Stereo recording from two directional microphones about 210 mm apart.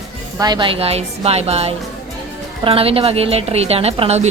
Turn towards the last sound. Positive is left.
turn(degrees=-30)  # may be behind; listen again after turning